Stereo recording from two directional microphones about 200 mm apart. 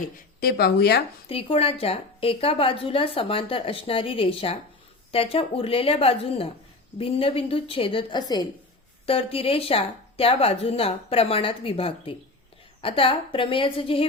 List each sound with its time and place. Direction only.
0.3 s speech: 50° left (ahead or behind)
1.3 s a woman's voice: 30° left (ahead or behind)